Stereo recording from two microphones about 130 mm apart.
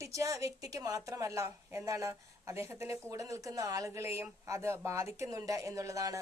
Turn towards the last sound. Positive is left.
turn(degrees=-25)  # may be behind; listen again after turning